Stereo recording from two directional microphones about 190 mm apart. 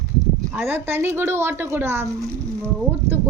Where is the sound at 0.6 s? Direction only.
10° right (ahead or behind).